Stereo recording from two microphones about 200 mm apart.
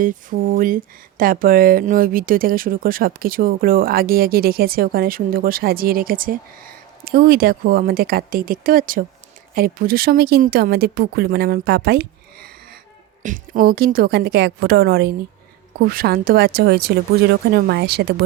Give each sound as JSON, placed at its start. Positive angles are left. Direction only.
{"t": 0.0, "sound": "speech", "side_deg": -40}